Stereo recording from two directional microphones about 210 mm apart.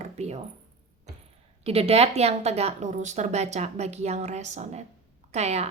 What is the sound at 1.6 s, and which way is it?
A woman's voice, 30° right (ahead or behind).